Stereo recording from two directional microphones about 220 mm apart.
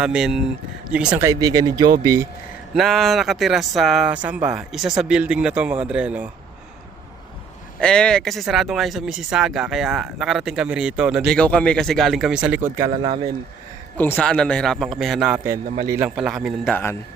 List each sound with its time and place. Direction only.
0.0 s speech: 5° right (ahead or behind)
2.7 s speech: centre (ahead or behind)
7.8 s speech: 5° left (ahead or behind); by 12.9 s 10° right (ahead or behind)
12.9 s speech: 30° right (ahead or behind)
14.0 s speech: 5° left (ahead or behind)